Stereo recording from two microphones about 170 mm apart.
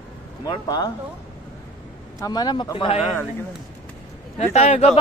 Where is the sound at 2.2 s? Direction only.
25° left (ahead or behind).